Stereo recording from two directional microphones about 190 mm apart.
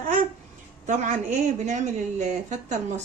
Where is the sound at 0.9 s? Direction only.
40° right (ahead or behind).